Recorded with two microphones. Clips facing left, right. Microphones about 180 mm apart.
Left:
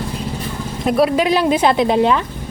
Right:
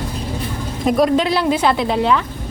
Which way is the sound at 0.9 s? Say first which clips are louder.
Even; 5° left (ahead or behind).